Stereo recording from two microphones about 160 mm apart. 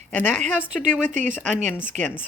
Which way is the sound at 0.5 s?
5° right (ahead or behind).